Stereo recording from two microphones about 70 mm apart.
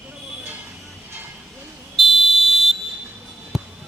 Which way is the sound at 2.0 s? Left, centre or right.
Centre.